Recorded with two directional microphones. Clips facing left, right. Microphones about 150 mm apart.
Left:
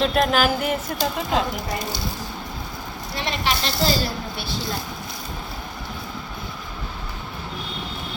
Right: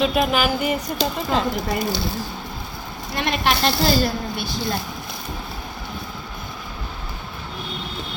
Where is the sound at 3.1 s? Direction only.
55° right (ahead or behind).